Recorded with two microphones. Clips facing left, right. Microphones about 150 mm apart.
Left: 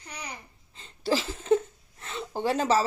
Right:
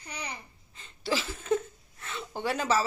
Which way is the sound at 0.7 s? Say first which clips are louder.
Left 4 dB; 30° left (ahead or behind).